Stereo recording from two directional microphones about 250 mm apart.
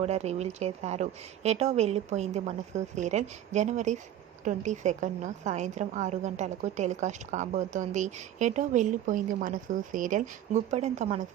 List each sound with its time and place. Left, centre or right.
0.0 s a woman's voice: right